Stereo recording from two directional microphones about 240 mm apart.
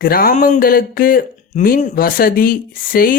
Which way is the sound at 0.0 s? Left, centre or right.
Left.